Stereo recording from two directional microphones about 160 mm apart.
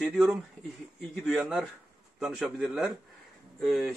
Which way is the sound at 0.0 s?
Centre (ahead or behind).